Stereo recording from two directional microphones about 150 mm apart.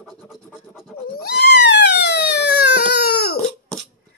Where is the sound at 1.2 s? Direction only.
90° left.